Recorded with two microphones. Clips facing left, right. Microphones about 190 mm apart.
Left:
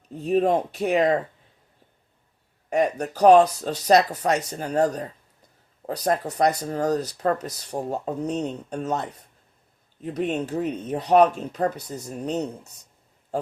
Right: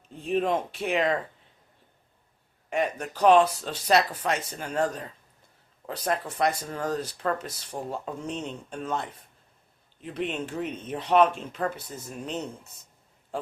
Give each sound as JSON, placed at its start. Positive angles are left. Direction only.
{"t": 0.1, "sound": "speech", "side_deg": 40}
{"t": 2.6, "sound": "speech", "side_deg": 40}